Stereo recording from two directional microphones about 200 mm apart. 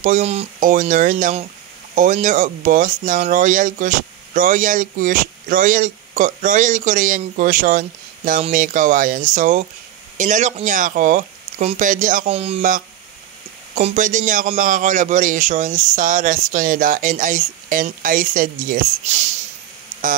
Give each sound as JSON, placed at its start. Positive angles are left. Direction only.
{"t": 0.0, "sound": "speech", "side_deg": -35}